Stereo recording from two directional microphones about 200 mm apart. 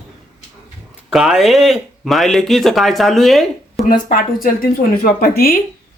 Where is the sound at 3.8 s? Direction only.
40° left (ahead or behind).